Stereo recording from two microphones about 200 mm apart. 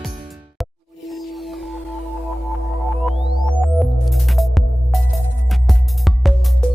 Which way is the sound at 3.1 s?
Centre (ahead or behind).